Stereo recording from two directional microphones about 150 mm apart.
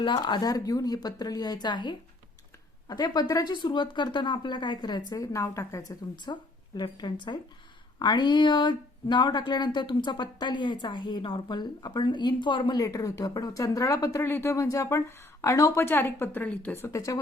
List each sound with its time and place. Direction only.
0.0 s speech: 30° left (ahead or behind)
6.2 s speech: 30° left (ahead or behind)